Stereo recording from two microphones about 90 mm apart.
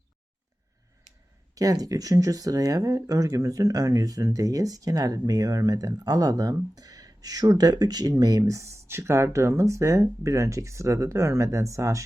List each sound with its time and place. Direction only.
1.5 s speech: 40° right (ahead or behind)